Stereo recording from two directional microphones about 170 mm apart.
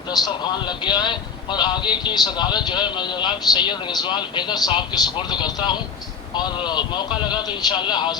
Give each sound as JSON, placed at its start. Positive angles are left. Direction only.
{"t": 0.6, "sound": "speech", "side_deg": 25}